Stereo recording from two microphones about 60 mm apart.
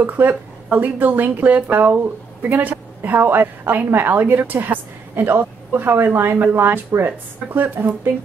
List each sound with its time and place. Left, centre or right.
0.0 s a woman's voice: right